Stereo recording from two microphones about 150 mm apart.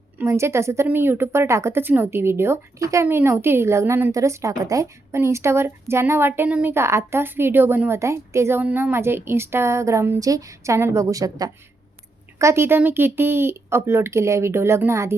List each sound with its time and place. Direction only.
0.2 s a woman's voice: 15° right (ahead or behind)